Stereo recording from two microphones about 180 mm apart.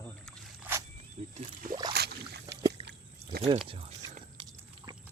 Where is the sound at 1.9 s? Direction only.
65° right (ahead or behind).